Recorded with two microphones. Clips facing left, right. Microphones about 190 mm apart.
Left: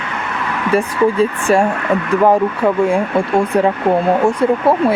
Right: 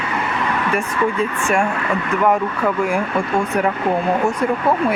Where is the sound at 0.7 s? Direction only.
35° left (ahead or behind).